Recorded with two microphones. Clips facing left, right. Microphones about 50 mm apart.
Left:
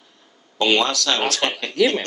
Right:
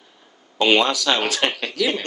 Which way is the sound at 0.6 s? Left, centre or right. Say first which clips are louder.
Right 1 dB; centre.